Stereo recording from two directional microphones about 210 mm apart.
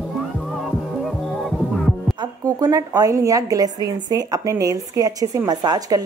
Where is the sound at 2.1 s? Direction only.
20° right (ahead or behind).